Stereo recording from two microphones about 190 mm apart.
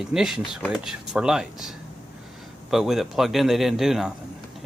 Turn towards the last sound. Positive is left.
turn(degrees=-5)  # may be behind; listen again after turning